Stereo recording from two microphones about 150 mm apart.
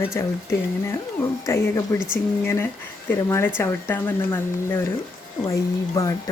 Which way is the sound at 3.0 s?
15° left (ahead or behind).